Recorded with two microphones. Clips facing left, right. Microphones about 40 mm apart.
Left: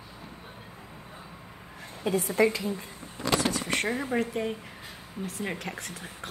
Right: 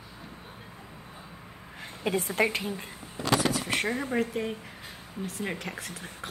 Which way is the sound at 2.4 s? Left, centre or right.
Right.